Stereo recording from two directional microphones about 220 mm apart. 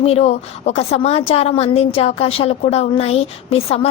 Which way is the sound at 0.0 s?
30° left (ahead or behind).